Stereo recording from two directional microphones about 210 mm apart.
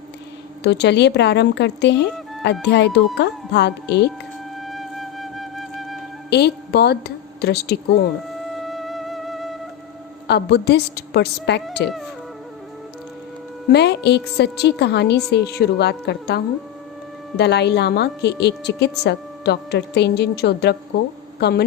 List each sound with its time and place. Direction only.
0.6 s a woman's voice: 55° left (ahead or behind)
4.6 s music: centre (ahead or behind)
6.3 s a woman's voice: 50° left (ahead or behind)
8.4 s music: centre (ahead or behind)
10.2 s a woman's voice: 50° left (ahead or behind)
13.7 s a woman's voice: 55° left (ahead or behind)